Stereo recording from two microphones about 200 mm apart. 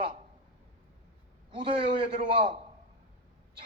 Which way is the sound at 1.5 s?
25° right (ahead or behind).